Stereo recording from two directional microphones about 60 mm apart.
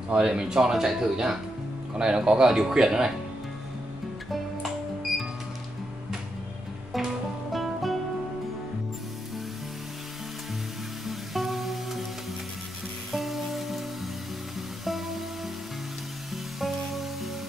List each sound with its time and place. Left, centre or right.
0.1 s speech: centre
7.5 s music: centre
11.1 s music: centre
13.1 s music: centre
14.9 s music: centre
16.5 s music: centre